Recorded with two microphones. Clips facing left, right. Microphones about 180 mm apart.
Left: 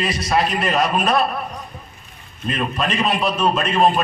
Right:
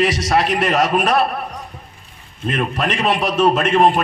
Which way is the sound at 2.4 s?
65° right (ahead or behind).